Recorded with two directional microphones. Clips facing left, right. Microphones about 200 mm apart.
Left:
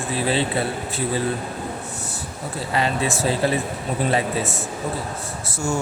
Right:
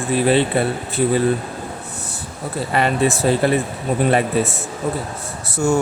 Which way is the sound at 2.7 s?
60° right (ahead or behind).